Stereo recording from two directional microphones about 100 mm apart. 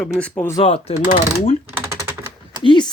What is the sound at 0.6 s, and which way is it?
Speech, 80° left.